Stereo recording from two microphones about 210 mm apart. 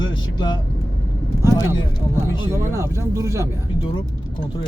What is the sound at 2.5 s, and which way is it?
Speech, 15° right (ahead or behind).